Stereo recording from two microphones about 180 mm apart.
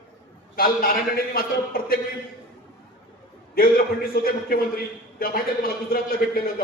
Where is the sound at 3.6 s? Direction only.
55° left (ahead or behind).